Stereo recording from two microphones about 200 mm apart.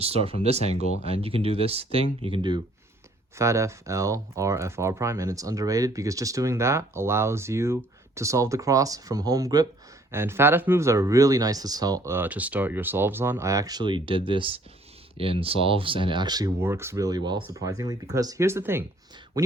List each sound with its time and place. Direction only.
0.0 s speech: 30° right (ahead or behind); by 18.9 s 10° right (ahead or behind)